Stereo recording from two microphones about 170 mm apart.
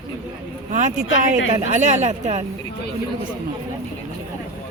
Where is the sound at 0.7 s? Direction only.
45° right (ahead or behind).